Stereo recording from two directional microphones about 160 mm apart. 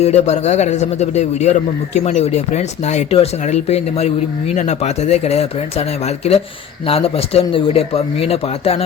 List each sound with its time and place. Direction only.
0.0 s a man's voice: 45° left (ahead or behind)